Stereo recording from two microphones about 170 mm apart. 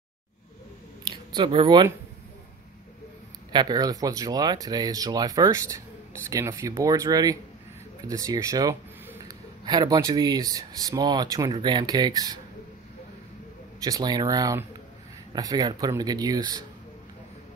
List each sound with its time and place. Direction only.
1.0 s speech: 25° right (ahead or behind)
3.5 s speech: 25° right (ahead or behind)
13.8 s speech: 25° right (ahead or behind)